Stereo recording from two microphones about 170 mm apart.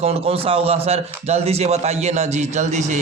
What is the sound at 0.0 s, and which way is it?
Speech, 35° right (ahead or behind).